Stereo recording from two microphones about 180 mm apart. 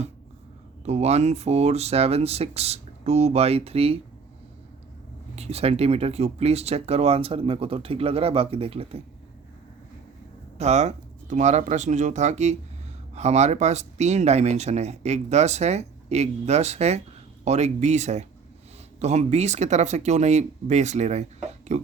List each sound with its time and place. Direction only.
0.9 s speech: 35° right (ahead or behind)
5.4 s speech: 35° right (ahead or behind)
10.6 s speech: 35° right (ahead or behind)